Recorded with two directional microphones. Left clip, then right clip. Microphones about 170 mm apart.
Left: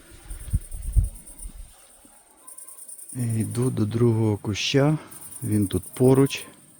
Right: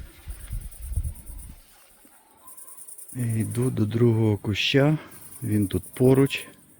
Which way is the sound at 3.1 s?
Centre (ahead or behind).